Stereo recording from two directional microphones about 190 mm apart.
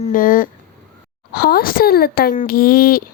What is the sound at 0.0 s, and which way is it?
A child's voice, 45° left (ahead or behind).